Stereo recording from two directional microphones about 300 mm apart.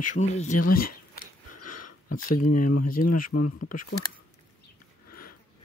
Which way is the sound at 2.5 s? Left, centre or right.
Left.